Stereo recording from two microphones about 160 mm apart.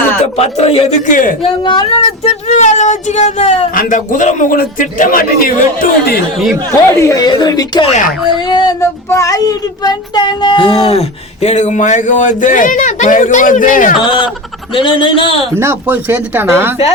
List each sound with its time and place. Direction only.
0.3 s speech: 40° left (ahead or behind)
1.0 s speech: 55° left (ahead or behind)
1.4 s speech: 30° left (ahead or behind); by 6.1 s 65° left (ahead or behind)
6.7 s a child's voice: 20° left (ahead or behind)
8.3 s a sound: 30° left (ahead or behind)
9.0 s a child's voice: 20° left (ahead or behind); by 13.9 s 55° left (ahead or behind)
14.8 s speech: 30° left (ahead or behind)
15.5 s speech: 15° right (ahead or behind)